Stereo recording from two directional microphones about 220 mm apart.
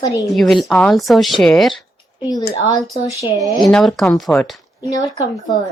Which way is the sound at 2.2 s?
15° left (ahead or behind).